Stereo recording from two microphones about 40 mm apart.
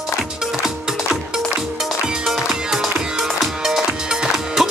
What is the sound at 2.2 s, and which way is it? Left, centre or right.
Music, centre.